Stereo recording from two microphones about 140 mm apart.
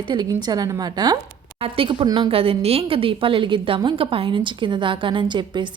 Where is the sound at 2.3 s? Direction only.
45° right (ahead or behind).